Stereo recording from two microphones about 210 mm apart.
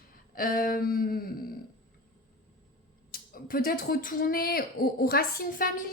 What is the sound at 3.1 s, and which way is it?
Speech, 45° left (ahead or behind).